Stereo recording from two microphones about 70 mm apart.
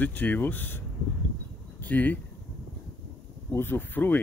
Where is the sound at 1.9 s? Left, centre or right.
Left.